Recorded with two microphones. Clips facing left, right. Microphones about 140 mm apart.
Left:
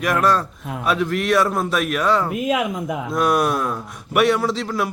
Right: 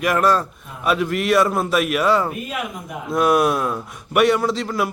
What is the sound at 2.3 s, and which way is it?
Speech, 90° left.